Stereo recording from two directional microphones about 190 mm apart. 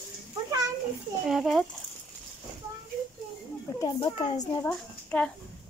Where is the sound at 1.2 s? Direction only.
Centre (ahead or behind).